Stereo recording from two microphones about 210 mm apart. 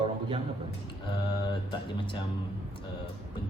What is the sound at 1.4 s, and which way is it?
Speech, 20° left (ahead or behind).